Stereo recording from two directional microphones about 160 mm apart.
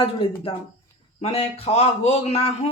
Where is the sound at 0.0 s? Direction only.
35° left (ahead or behind).